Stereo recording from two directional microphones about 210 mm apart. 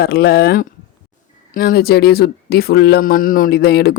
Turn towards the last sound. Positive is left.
turn(degrees=50)  # may be behind; listen again after turning